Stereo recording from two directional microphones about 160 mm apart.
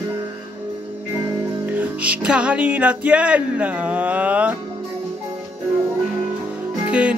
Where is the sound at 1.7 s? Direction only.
10° right (ahead or behind).